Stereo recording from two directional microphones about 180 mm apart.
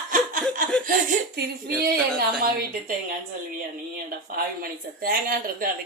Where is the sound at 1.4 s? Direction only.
60° right (ahead or behind).